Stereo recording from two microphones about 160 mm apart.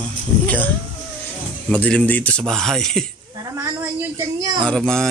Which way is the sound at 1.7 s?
5° left (ahead or behind).